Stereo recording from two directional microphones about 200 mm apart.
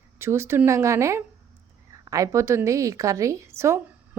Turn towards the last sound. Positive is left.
turn(degrees=-15)  # may be behind; listen again after turning